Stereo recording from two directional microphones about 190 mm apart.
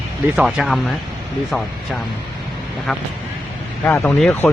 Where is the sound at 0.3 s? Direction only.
5° right (ahead or behind).